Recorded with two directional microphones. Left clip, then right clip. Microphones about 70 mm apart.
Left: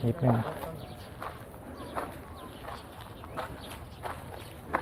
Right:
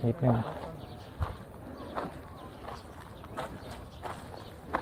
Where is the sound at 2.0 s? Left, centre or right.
Right.